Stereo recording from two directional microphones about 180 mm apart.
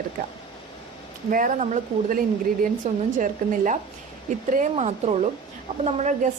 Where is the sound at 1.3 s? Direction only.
45° right (ahead or behind).